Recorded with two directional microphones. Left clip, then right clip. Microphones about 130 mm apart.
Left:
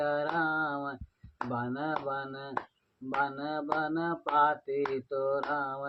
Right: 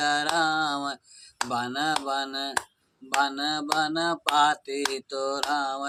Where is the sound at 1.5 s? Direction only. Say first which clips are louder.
Right 7 dB; 70° right (ahead or behind).